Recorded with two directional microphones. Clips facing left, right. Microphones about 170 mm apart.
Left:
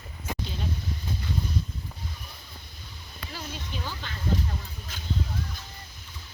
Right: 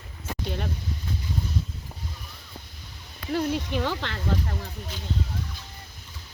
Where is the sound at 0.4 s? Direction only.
65° right (ahead or behind).